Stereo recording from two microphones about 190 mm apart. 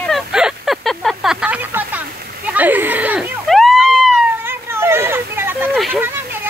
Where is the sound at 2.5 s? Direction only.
10° right (ahead or behind).